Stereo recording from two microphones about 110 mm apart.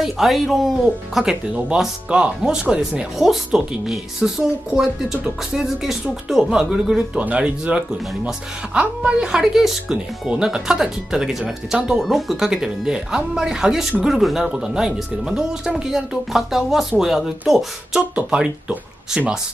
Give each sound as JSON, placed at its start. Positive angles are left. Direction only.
{"t": 0.0, "sound": "speech", "side_deg": 0}